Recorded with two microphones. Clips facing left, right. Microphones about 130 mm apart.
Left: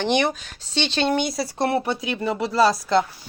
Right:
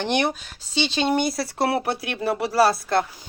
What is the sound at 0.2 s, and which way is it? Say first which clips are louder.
Speech: left 1 dB; 10° right (ahead or behind).